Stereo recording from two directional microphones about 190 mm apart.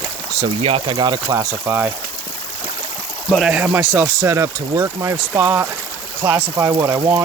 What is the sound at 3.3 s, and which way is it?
Speech, 5° right (ahead or behind).